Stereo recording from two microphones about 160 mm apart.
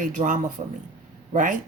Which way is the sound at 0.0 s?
55° right (ahead or behind).